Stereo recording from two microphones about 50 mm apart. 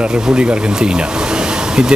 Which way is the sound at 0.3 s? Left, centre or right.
Centre.